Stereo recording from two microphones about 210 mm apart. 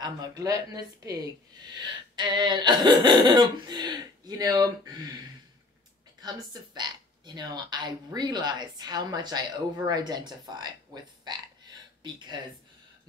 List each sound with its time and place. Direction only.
0.0 s speech: 20° right (ahead or behind)
6.2 s speech: 20° right (ahead or behind)